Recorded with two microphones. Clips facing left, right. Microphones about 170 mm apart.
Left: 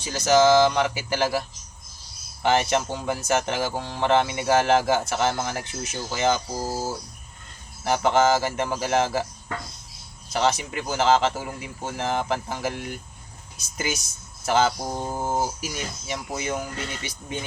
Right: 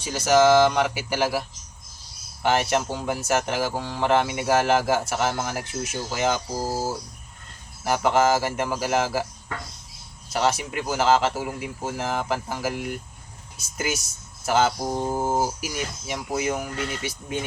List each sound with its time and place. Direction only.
0.0 s speech: 5° right (ahead or behind)
6.7 s speech: 30° right (ahead or behind)
7.9 s speech: 5° right (ahead or behind)
10.3 s speech: 5° right (ahead or behind)